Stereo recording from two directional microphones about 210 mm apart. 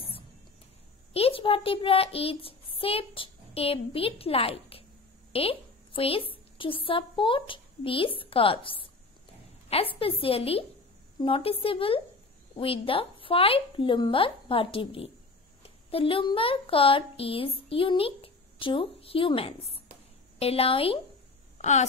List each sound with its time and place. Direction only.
1.1 s a child's voice: 25° left (ahead or behind)